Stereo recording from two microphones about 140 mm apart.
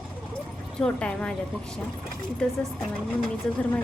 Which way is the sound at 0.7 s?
5° left (ahead or behind).